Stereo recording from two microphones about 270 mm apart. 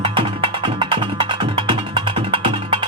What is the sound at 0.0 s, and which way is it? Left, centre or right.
Music, centre.